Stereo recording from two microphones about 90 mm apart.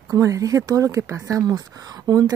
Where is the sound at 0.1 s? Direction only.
40° right (ahead or behind).